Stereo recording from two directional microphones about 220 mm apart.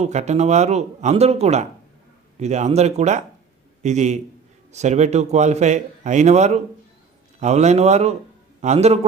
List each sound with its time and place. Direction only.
0.0 s a man's voice: 30° right (ahead or behind)